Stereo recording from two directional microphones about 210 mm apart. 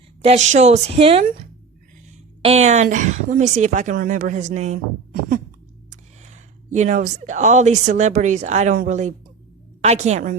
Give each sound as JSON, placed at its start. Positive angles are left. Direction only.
{"t": 0.2, "sound": "a woman's voice", "side_deg": -30}
{"t": 1.2, "sound": "a woman's voice", "side_deg": -40}
{"t": 2.4, "sound": "a woman's voice", "side_deg": -30}
{"t": 5.9, "sound": "a woman's voice", "side_deg": -35}